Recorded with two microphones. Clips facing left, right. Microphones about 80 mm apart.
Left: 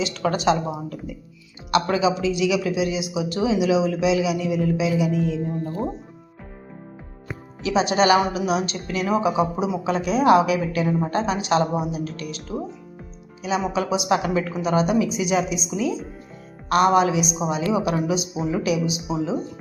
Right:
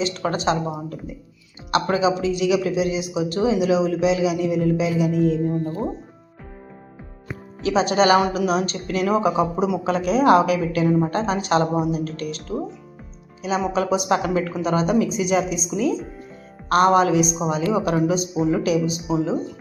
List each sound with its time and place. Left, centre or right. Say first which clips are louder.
0.0 s speech: left 1 dB; right
1.7 s speech: right 1 dB; right
7.6 s a woman's voice: right 1 dB; right